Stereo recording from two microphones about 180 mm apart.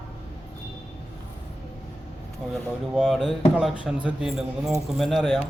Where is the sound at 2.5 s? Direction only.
Centre (ahead or behind).